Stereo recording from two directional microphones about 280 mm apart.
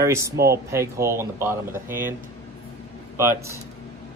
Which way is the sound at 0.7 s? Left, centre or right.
Centre.